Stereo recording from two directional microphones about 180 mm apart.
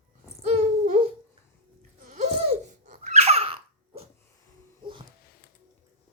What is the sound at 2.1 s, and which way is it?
Babbling, 35° right (ahead or behind).